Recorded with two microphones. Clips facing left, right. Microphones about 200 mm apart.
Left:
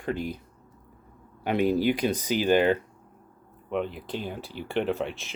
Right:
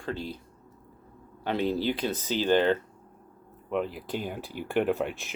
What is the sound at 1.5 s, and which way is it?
Speech, 15° left (ahead or behind).